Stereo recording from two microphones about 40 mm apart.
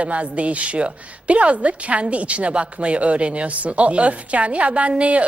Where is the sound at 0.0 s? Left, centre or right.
Right.